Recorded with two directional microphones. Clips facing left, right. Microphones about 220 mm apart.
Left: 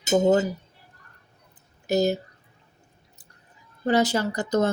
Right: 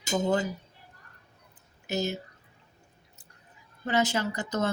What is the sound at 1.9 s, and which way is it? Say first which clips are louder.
Speech: left 8 dB; 40° left (ahead or behind).